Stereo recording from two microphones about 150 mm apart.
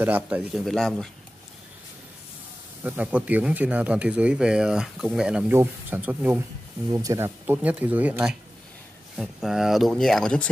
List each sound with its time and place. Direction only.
0.0 s speech: 10° right (ahead or behind)
0.5 s speech: centre (ahead or behind)
2.8 s speech: 10° right (ahead or behind)
7.4 s speech: 10° right (ahead or behind); by 10.5 s 5° left (ahead or behind)